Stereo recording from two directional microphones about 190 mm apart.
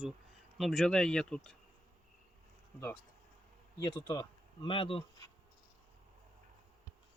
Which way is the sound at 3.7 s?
20° left (ahead or behind).